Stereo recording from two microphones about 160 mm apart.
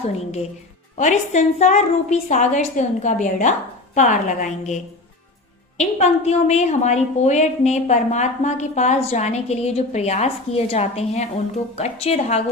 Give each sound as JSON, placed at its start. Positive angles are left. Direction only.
{"t": 0.9, "sound": "a woman's voice", "side_deg": 50}